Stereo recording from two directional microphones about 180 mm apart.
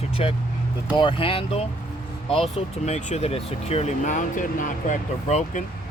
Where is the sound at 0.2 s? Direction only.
35° left (ahead or behind).